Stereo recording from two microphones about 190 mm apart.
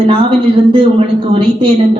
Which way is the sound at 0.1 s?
25° right (ahead or behind).